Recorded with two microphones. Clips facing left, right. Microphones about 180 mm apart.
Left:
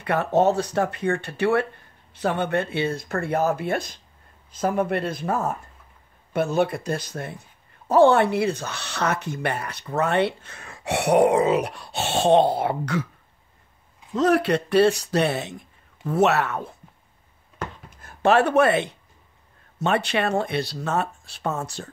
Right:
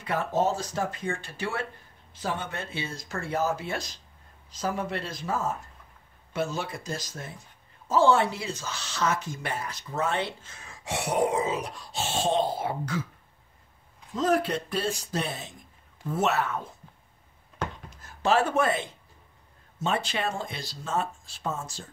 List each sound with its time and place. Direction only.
0.0 s speech: 65° left (ahead or behind)
14.1 s speech: 70° left (ahead or behind)
17.8 s speech: 60° left (ahead or behind)